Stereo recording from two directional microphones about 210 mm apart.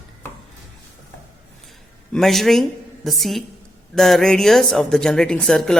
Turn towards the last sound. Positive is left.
turn(degrees=5)  # may be behind; listen again after turning